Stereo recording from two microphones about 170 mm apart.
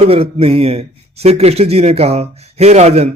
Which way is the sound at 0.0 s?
35° right (ahead or behind).